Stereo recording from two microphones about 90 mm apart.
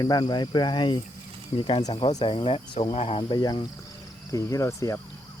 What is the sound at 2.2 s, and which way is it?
Speech, 85° left.